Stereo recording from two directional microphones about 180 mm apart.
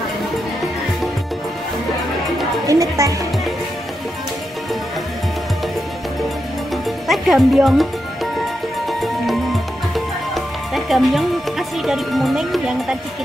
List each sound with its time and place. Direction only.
2.6 s a woman's voice: 20° right (ahead or behind)
7.1 s speech: centre (ahead or behind)
9.0 s music: centre (ahead or behind)